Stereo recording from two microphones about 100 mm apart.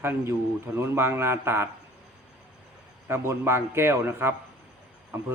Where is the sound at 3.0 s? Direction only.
25° right (ahead or behind).